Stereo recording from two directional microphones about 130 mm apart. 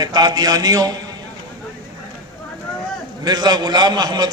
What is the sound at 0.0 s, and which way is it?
Speech, 30° right (ahead or behind).